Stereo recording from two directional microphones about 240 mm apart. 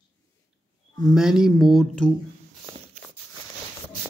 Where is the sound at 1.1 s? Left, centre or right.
Centre.